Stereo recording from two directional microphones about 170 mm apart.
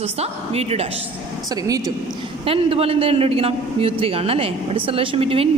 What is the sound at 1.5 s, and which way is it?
Speech, 20° right (ahead or behind).